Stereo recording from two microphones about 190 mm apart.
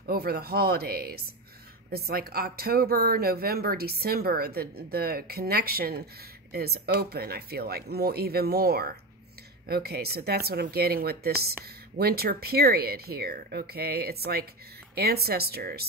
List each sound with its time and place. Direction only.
0.0 s speech: 55° right (ahead or behind)